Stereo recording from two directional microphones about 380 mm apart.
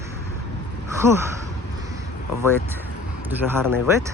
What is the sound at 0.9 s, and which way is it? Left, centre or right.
Speech, centre.